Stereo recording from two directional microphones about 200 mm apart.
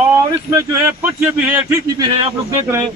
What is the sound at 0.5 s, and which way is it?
Speech, 10° right (ahead or behind).